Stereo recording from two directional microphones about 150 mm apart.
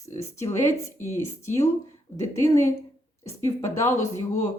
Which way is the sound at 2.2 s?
20° left (ahead or behind).